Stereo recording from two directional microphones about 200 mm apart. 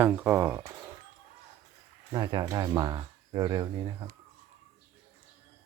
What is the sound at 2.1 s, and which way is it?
Speech, 20° right (ahead or behind).